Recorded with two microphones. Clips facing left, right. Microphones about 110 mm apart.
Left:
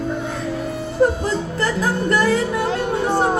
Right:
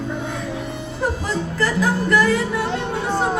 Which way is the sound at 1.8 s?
35° left (ahead or behind).